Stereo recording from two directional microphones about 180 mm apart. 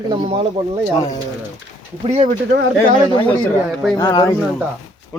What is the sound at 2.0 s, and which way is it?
Speech, 40° right (ahead or behind).